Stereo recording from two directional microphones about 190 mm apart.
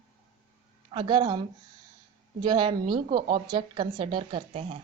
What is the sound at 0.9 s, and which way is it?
Speech, 25° right (ahead or behind).